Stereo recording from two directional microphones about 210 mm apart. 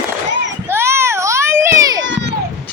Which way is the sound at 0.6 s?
10° right (ahead or behind).